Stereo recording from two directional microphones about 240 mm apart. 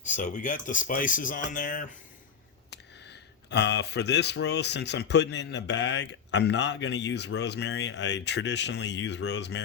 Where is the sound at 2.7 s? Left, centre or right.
Left.